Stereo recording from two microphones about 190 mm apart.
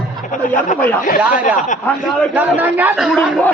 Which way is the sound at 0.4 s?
45° left (ahead or behind).